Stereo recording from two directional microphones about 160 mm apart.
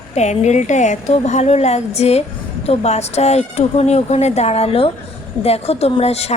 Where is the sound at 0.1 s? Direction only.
45° left (ahead or behind).